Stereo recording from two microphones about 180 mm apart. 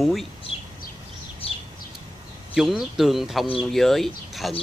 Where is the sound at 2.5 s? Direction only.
Centre (ahead or behind).